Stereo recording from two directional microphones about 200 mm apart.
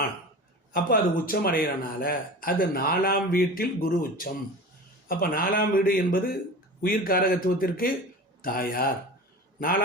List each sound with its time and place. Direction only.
0.7 s a man's voice: 45° left (ahead or behind)